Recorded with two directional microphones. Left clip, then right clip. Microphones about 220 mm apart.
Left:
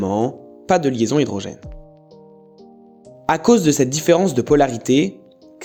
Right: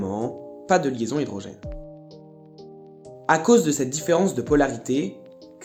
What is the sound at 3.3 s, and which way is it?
Speech, 35° left (ahead or behind).